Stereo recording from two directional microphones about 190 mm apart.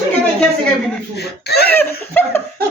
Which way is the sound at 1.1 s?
60° left (ahead or behind).